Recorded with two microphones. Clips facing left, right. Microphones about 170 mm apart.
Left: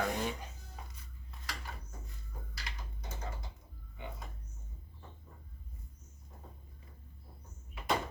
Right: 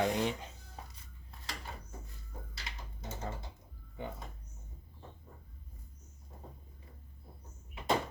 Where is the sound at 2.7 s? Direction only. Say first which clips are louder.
Left 1 dB; 25° right (ahead or behind).